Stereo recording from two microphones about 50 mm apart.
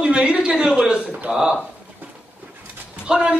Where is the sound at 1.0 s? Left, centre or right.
Right.